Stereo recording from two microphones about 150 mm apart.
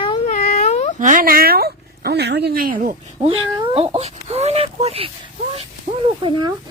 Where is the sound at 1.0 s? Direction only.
60° right (ahead or behind).